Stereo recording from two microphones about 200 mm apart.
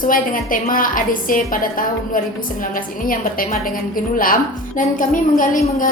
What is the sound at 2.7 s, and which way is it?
Speech, 45° left (ahead or behind).